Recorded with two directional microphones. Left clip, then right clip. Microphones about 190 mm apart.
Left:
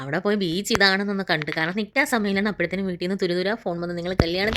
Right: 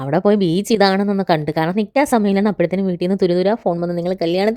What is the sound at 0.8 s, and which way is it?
A woman's voice, 30° right (ahead or behind).